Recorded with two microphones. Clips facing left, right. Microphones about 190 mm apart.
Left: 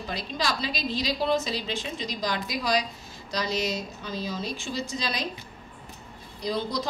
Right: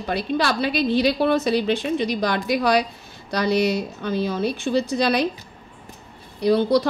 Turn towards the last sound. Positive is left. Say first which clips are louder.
# right 11 dB
turn(degrees=-60)  # may be behind; listen again after turning